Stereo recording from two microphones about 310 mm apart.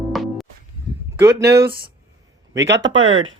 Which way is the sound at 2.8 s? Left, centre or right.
Right.